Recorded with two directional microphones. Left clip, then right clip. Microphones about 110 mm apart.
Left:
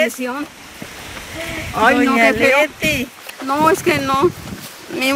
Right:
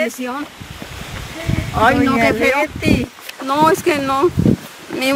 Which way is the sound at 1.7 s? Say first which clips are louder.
Even; 5° right (ahead or behind).